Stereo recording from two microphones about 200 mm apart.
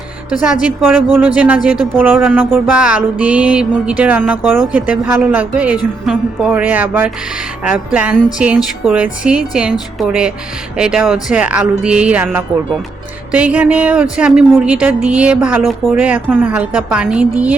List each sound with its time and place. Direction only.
0.6 s a woman's voice: 5° right (ahead or behind)